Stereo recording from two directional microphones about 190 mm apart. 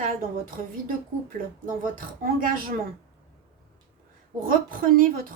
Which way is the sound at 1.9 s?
45° right (ahead or behind).